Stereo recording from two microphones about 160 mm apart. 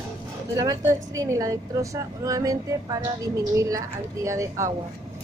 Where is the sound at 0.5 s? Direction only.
20° right (ahead or behind).